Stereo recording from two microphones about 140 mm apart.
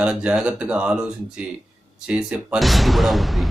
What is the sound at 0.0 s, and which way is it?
Speech, 10° right (ahead or behind).